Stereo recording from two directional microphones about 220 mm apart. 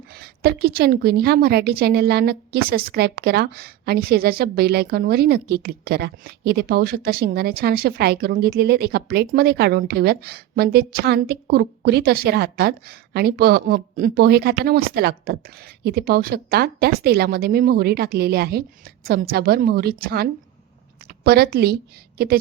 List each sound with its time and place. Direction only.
0.1 s a woman's voice: 45° right (ahead or behind)